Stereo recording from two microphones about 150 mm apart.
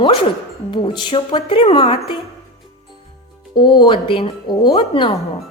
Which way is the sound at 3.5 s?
35° left (ahead or behind).